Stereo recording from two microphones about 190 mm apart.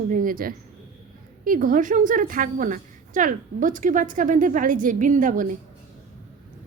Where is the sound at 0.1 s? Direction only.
45° right (ahead or behind).